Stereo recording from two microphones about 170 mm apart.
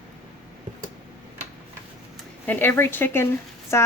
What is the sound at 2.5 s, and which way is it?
Speech, 10° left (ahead or behind).